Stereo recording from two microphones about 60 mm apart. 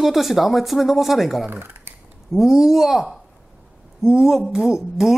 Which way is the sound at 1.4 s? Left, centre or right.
Right.